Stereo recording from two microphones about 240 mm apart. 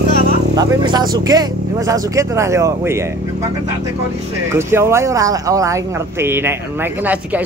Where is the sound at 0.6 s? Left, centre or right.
Centre.